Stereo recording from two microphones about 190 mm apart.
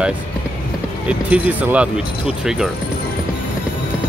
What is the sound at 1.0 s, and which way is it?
Speech, 5° right (ahead or behind).